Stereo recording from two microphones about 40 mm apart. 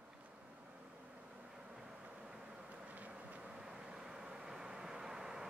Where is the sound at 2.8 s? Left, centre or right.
Right.